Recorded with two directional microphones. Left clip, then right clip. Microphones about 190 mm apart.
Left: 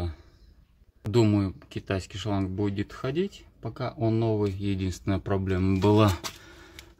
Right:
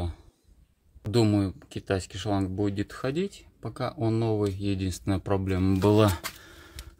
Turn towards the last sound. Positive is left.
turn(degrees=-10)  # may be behind; listen again after turning